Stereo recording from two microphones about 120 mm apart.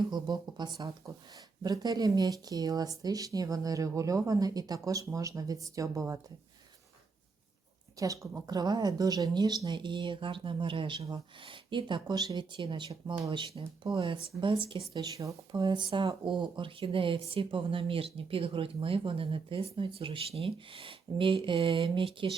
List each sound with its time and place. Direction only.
0.1 s speech: 35° right (ahead or behind)
7.9 s speech: 25° right (ahead or behind); by 14.8 s 45° right (ahead or behind)
14.9 s speech: 30° right (ahead or behind)